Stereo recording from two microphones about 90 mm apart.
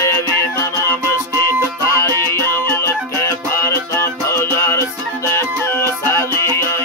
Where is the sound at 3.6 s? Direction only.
30° left (ahead or behind).